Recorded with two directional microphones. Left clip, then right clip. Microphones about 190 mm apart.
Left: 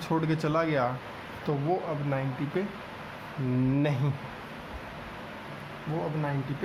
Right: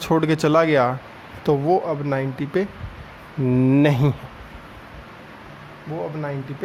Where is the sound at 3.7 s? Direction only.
55° right (ahead or behind).